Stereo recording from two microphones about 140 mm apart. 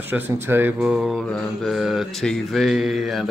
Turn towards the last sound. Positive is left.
turn(degrees=0)  # may be behind; listen again after turning